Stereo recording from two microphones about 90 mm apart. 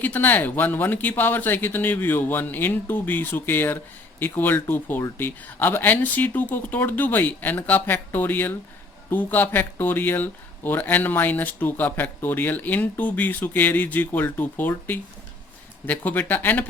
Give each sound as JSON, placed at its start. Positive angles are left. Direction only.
{"t": 0.0, "sound": "speech", "side_deg": 20}